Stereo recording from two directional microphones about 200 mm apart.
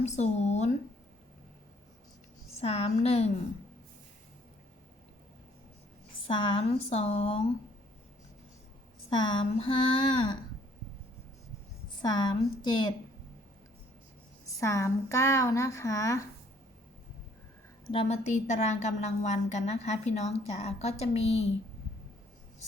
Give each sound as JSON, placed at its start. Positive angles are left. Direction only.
{"t": 0.0, "sound": "a woman's voice", "side_deg": 35}
{"t": 2.6, "sound": "a woman's voice", "side_deg": 30}
{"t": 6.2, "sound": "speech", "side_deg": 25}
{"t": 9.0, "sound": "speech", "side_deg": 25}
{"t": 12.0, "sound": "speech", "side_deg": 20}
{"t": 14.4, "sound": "a woman's voice", "side_deg": 15}
{"t": 17.9, "sound": "a woman's voice", "side_deg": 35}